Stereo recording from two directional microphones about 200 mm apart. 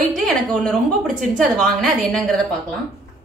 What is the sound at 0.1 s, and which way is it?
A woman's voice, centre (ahead or behind).